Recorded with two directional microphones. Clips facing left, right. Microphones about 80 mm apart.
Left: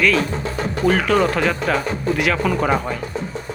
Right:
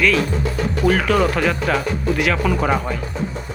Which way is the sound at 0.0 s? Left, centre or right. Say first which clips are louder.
Even; centre.